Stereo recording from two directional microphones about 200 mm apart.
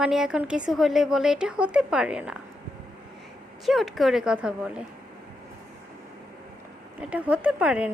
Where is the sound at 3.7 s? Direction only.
Centre (ahead or behind).